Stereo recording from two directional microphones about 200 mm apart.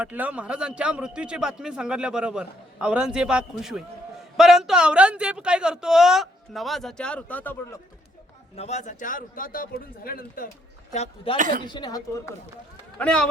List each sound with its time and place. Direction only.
0.0 s a man's voice: 5° right (ahead or behind); by 7.8 s 10° left (ahead or behind)
8.5 s speech: 35° left (ahead or behind)
10.9 s speech: 35° left (ahead or behind)
11.3 s a woman's voice: 40° right (ahead or behind)
11.6 s a woman's voice: 20° left (ahead or behind)
13.0 s a man's voice: 5° left (ahead or behind)